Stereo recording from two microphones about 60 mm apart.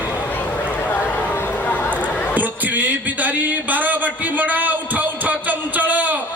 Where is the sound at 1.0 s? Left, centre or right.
Left.